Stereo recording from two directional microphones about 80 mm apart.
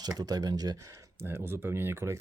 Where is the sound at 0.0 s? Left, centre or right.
Right.